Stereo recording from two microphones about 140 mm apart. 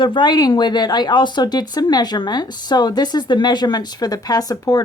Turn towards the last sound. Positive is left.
turn(degrees=25)  # may be behind; listen again after turning